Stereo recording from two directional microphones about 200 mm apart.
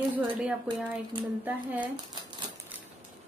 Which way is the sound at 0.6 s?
25° right (ahead or behind).